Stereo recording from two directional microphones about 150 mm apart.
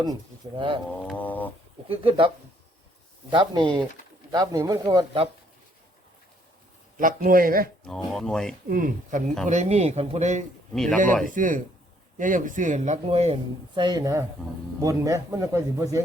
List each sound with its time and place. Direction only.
0.0 s speech: 30° right (ahead or behind)
1.0 s a sound: 10° left (ahead or behind)
1.9 s a man's voice: 35° right (ahead or behind)
6.9 s a man's voice: 65° right (ahead or behind)
7.9 s speech: centre (ahead or behind)
8.7 s speech: 65° right (ahead or behind)
9.5 s a man's voice: 50° right (ahead or behind)
10.8 s speech: 5° left (ahead or behind)
11.3 s a man's voice: 60° right (ahead or behind); by 16.0 s 20° right (ahead or behind)